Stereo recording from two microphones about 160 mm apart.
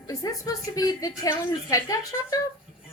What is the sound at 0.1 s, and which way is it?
A woman's voice, 20° left (ahead or behind).